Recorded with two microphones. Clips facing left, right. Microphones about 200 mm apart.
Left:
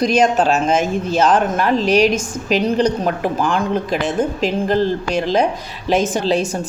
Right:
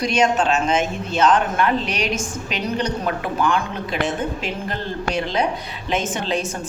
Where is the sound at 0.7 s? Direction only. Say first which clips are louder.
Left 4 dB; centre (ahead or behind).